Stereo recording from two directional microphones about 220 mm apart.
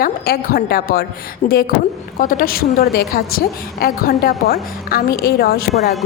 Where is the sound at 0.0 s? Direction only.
40° left (ahead or behind).